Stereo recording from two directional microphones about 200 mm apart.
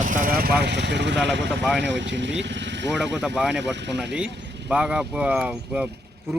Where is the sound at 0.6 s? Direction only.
60° right (ahead or behind).